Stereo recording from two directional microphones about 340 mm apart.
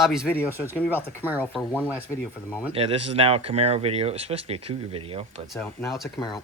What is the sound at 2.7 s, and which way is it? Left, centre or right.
Speech, centre.